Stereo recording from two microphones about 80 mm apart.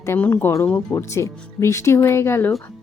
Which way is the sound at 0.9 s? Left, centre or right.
Left.